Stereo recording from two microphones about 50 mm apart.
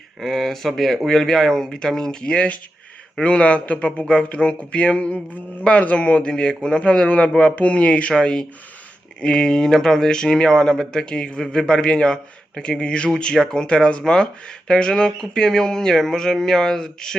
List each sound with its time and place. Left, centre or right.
0.2 s a man's voice: centre; by 8.1 s left
8.1 s speech: centre